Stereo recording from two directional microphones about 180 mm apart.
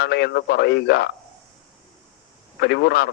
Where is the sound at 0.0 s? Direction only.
65° left (ahead or behind).